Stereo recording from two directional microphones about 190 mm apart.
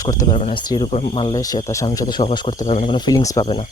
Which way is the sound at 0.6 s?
25° left (ahead or behind).